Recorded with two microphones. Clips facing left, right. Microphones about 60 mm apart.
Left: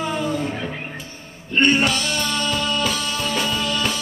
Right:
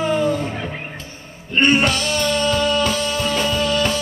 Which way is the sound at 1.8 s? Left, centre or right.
Centre.